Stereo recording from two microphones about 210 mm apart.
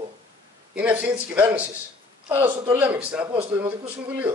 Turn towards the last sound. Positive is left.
turn(degrees=-10)  # may be behind; listen again after turning